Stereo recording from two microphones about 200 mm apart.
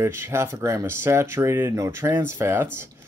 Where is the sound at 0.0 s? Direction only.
10° right (ahead or behind).